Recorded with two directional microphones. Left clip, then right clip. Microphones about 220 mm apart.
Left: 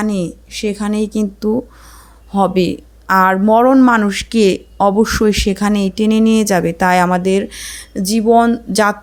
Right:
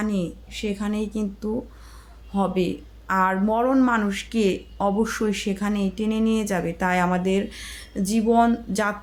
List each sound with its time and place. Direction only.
0.0 s speech: 40° left (ahead or behind)